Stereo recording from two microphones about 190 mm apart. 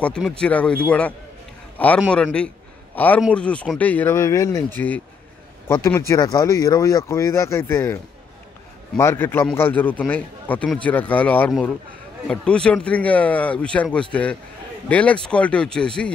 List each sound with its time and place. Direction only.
0.0 s a man's voice: 5° left (ahead or behind)